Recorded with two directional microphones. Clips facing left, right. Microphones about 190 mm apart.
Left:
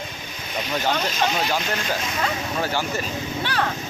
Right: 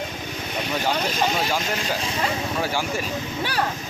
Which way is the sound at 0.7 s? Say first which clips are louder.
Left 1 dB; 10° right (ahead or behind).